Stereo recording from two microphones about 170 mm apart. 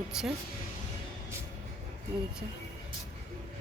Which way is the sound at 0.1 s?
5° right (ahead or behind).